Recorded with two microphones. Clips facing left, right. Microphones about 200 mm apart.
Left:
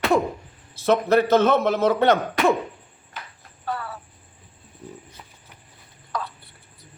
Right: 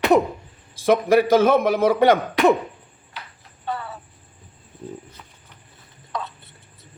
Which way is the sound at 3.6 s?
25° right (ahead or behind).